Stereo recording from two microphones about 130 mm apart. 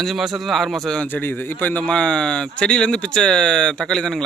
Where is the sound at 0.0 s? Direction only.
Centre (ahead or behind).